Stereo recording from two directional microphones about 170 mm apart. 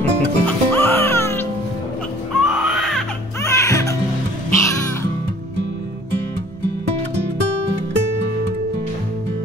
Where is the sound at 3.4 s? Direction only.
15° left (ahead or behind).